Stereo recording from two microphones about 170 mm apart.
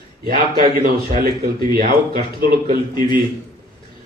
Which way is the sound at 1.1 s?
65° right (ahead or behind).